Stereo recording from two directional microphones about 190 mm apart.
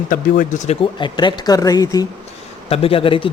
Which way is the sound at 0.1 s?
45° left (ahead or behind).